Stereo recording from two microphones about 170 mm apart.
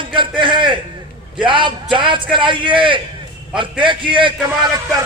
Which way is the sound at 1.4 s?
30° right (ahead or behind).